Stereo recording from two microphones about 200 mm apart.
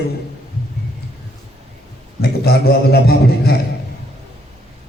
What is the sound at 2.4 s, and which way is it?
A man's voice, 50° left (ahead or behind).